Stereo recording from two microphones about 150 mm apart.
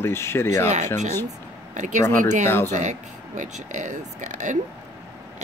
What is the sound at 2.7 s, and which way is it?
Speech, 55° right (ahead or behind).